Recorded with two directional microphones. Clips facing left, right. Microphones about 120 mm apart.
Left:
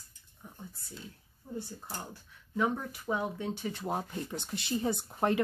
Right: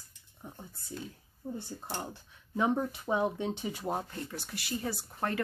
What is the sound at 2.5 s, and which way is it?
Speech, 25° right (ahead or behind).